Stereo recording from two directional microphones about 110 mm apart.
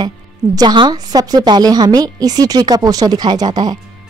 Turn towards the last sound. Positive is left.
turn(degrees=-40)  # may be behind; listen again after turning